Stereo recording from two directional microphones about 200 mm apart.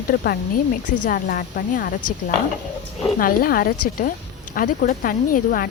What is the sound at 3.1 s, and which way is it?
Speech, 45° left (ahead or behind).